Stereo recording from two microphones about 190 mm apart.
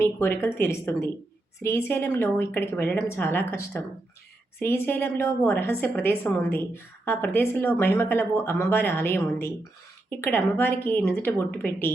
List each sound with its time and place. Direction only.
0.0 s a woman's voice: 15° left (ahead or behind)